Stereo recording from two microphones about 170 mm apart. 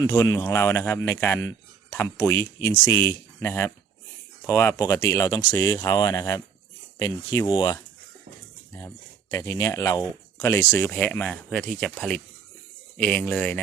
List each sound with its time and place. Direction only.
0.0 s speech: 15° left (ahead or behind)
9.3 s speech: 20° left (ahead or behind)